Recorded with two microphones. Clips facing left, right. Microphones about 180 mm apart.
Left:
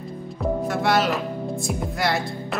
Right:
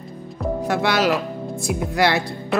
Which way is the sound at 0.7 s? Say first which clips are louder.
Right 3 dB; 75° right (ahead or behind).